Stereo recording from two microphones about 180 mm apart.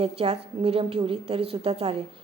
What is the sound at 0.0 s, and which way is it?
Speech, 35° right (ahead or behind).